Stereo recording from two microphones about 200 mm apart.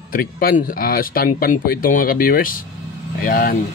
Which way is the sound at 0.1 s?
45° left (ahead or behind).